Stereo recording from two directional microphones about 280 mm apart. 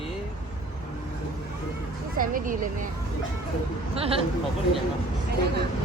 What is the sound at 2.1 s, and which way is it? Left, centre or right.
Speech, right.